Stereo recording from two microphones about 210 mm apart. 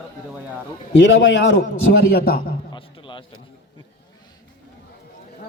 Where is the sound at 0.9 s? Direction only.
60° left (ahead or behind).